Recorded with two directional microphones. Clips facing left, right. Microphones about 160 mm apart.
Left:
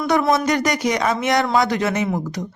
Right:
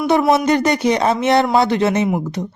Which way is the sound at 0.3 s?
25° right (ahead or behind).